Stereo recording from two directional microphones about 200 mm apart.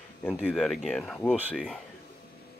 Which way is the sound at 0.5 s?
5° left (ahead or behind).